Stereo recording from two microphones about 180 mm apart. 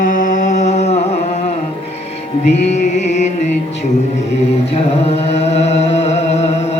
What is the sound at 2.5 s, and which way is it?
Music, 40° left (ahead or behind).